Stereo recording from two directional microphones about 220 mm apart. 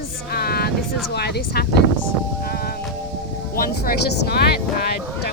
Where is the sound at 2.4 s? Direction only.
45° left (ahead or behind).